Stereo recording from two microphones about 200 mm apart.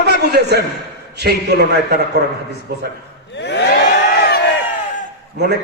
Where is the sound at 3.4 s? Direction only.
60° left (ahead or behind).